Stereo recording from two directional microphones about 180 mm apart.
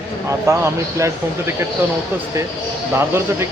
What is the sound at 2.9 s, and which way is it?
Speech, 15° right (ahead or behind).